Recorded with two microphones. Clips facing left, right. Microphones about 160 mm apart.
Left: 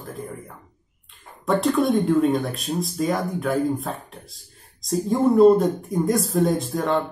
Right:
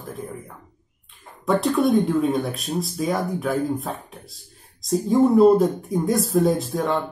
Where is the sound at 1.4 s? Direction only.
Centre (ahead or behind).